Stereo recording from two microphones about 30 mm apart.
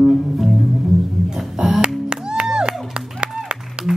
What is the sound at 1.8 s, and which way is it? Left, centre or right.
Music, right.